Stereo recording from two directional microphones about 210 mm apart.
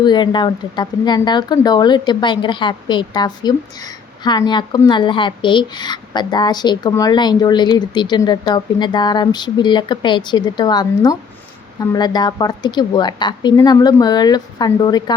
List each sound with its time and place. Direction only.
0.0 s speech: 20° left (ahead or behind)